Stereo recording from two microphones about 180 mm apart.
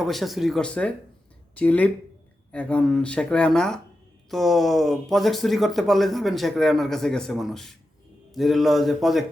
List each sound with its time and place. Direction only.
0.0 s speech: centre (ahead or behind)